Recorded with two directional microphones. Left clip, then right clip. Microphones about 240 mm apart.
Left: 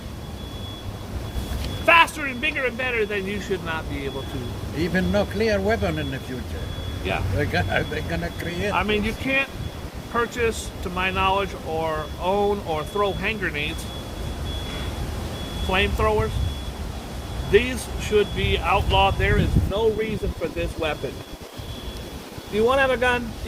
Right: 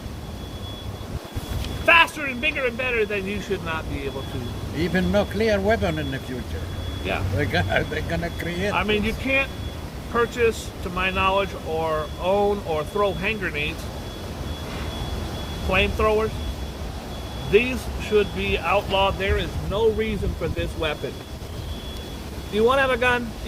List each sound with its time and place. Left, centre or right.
1.9 s speech: centre
4.8 s speech: centre
7.3 s speech: centre
8.7 s speech: centre
15.7 s speech: centre
17.5 s speech: centre
19.7 s speech: centre
22.5 s speech: centre